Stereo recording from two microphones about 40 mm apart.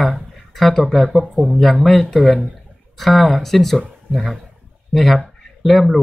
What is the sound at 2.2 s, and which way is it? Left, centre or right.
Speech, centre.